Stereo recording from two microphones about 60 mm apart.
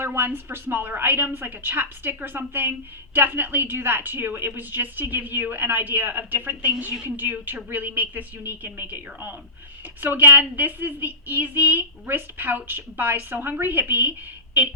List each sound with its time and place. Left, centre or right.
0.0 s a woman's voice: right